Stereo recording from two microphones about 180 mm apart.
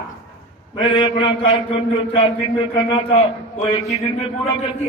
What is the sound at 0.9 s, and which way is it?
A man's voice, 30° left (ahead or behind).